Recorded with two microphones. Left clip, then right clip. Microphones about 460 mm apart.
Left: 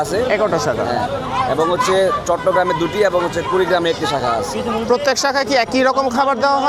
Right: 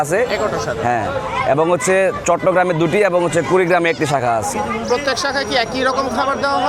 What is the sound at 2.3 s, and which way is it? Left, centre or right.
Speech, right.